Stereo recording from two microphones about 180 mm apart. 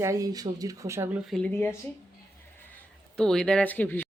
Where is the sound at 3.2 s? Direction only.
5° left (ahead or behind).